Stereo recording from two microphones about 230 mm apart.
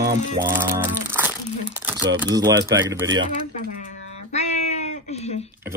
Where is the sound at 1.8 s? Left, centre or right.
Centre.